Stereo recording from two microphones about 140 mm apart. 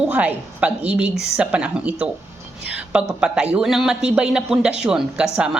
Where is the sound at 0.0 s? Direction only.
10° right (ahead or behind).